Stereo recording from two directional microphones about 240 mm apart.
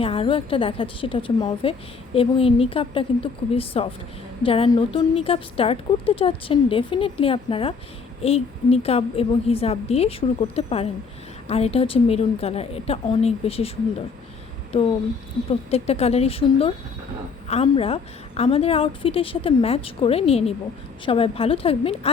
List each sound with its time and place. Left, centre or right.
0.0 s a woman's voice: left
15.4 s a woman's voice: left